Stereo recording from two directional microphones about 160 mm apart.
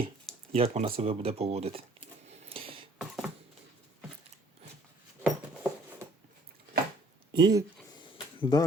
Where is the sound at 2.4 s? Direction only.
35° right (ahead or behind).